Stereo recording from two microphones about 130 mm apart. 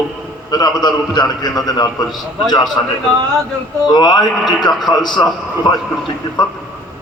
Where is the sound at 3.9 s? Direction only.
35° left (ahead or behind).